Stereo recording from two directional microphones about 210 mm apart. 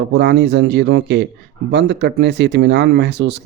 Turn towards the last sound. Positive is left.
turn(degrees=-55)  # may be behind; listen again after turning